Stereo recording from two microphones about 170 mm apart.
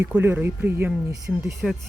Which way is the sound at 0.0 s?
15° right (ahead or behind).